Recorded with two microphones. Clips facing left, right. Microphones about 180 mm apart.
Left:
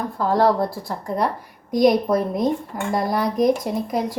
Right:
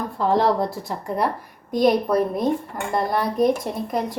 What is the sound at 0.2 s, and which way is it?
Speech, 25° right (ahead or behind).